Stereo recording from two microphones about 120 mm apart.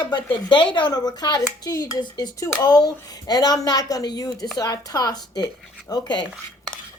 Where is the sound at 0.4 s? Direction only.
40° left (ahead or behind).